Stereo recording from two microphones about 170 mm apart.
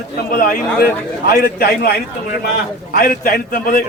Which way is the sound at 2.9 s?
60° left (ahead or behind).